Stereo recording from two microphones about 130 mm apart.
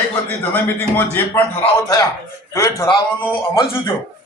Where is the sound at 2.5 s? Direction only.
25° left (ahead or behind).